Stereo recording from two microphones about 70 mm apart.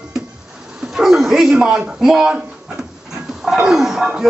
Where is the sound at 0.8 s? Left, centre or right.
Centre.